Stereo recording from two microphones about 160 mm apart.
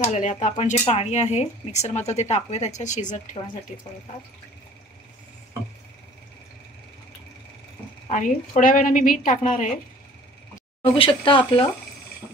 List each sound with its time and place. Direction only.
0.1 s speech: 45° left (ahead or behind)
8.1 s a woman's voice: 55° left (ahead or behind)
10.8 s speech: 35° left (ahead or behind)